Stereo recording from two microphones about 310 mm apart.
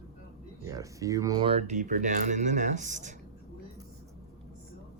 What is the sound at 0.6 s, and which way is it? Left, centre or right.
Speech, centre.